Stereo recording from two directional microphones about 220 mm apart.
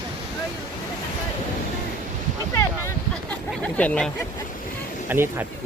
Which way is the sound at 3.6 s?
5° left (ahead or behind).